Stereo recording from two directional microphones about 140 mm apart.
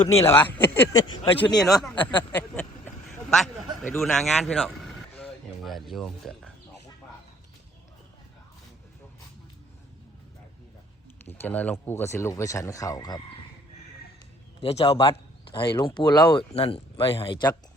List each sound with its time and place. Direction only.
0.2 s speech: 15° left (ahead or behind)
0.9 s speech: 30° left (ahead or behind)
1.5 s speech: centre (ahead or behind)
2.0 s speech: 35° left (ahead or behind)
2.3 s a sound: 10° left (ahead or behind)
4.0 s speech: centre (ahead or behind)
11.3 s speech: 15° left (ahead or behind); by 13.2 s 30° left (ahead or behind)
14.6 s a man's voice: 45° left (ahead or behind)
15.5 s speech: 35° left (ahead or behind)